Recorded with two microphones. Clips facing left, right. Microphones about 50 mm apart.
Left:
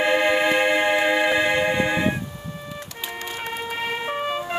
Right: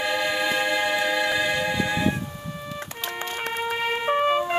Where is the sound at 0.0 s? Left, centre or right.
Left.